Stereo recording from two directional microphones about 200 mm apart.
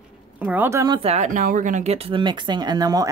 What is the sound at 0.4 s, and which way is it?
Speech, 10° right (ahead or behind).